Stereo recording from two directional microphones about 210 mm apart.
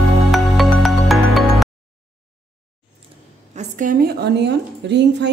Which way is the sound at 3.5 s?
40° right (ahead or behind).